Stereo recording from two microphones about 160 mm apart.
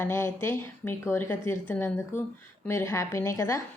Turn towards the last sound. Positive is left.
turn(degrees=20)  # may be behind; listen again after turning